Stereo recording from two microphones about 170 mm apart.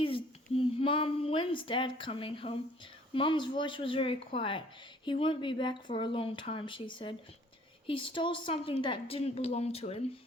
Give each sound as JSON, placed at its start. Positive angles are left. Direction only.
{"t": 0.0, "sound": "child singing", "side_deg": 30}
{"t": 3.2, "sound": "a woman's voice", "side_deg": 30}